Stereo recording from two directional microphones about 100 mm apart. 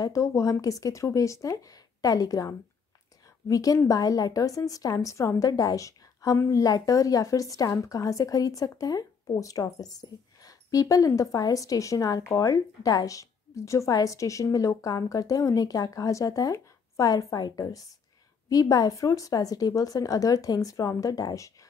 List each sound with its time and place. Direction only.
0.0 s a woman's voice: 30° left (ahead or behind)